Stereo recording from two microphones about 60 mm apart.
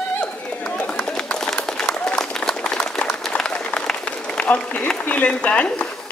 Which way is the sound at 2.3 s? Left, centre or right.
Centre.